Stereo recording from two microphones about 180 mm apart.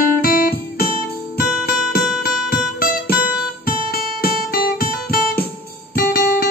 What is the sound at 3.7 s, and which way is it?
Guitar, 55° left (ahead or behind).